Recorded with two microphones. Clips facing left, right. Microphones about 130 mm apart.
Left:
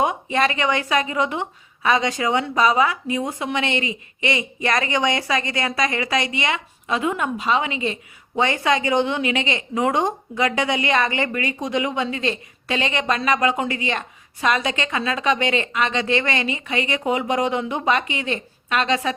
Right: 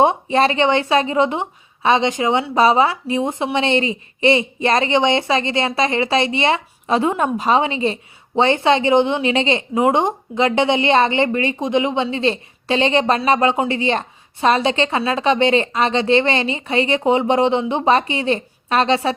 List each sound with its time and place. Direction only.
0.0 s a woman's voice: 30° right (ahead or behind)